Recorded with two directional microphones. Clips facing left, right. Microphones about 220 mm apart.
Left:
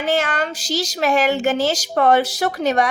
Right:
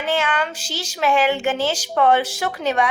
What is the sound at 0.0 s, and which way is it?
A woman's voice, 40° left (ahead or behind).